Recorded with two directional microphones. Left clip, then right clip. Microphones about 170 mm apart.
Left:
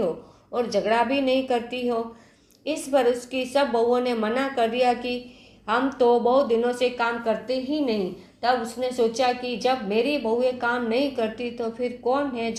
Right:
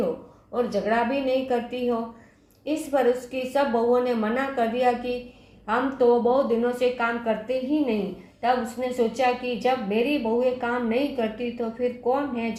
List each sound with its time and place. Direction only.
0.5 s a woman's voice: 35° left (ahead or behind)